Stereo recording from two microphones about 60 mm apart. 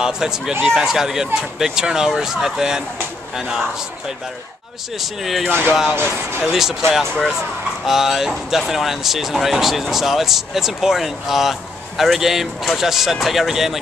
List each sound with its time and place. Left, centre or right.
0.0 s speech: centre
5.0 s speech: centre
5.9 s speech: right
6.4 s speech: centre